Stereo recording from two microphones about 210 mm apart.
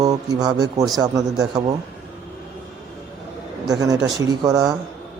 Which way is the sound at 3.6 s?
15° right (ahead or behind).